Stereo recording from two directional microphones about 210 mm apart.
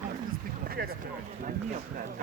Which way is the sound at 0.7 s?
45° right (ahead or behind).